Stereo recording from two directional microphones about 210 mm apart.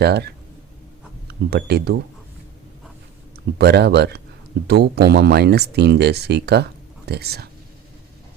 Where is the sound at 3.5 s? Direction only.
50° right (ahead or behind).